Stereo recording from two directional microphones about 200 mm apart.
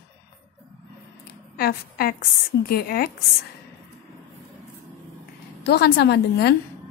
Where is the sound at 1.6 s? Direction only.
50° left (ahead or behind).